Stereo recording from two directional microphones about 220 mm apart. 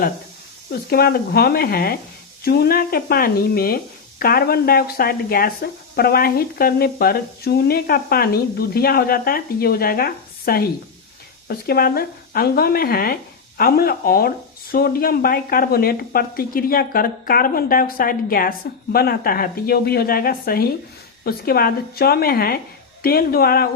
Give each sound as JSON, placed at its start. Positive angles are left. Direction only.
{"t": 0.7, "sound": "speech", "side_deg": 45}